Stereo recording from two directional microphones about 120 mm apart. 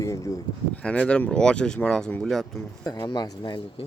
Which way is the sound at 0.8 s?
10° left (ahead or behind).